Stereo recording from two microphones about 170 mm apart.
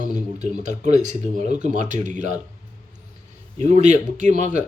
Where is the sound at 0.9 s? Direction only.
45° right (ahead or behind).